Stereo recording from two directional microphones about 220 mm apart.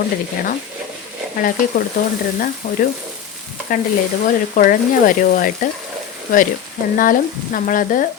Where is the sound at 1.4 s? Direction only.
40° left (ahead or behind).